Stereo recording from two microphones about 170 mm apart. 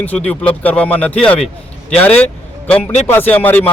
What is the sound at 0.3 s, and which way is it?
A man's voice, 10° left (ahead or behind).